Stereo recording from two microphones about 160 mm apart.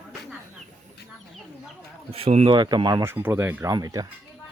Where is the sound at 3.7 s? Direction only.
25° right (ahead or behind).